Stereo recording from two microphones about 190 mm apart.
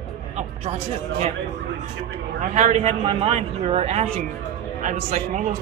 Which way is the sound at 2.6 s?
35° right (ahead or behind).